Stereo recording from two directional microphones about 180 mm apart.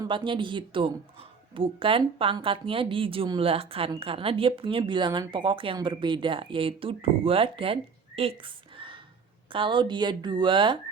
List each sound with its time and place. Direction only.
0.0 s speech: 25° right (ahead or behind)